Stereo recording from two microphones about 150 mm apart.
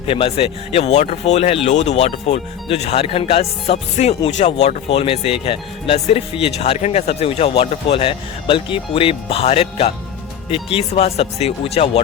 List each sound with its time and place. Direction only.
0.1 s speech: 40° left (ahead or behind)